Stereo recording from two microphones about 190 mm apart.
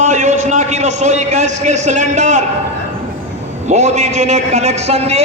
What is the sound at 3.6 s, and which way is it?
A man's voice, 35° right (ahead or behind).